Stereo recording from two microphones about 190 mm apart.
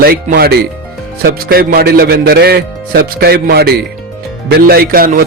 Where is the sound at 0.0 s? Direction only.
50° right (ahead or behind).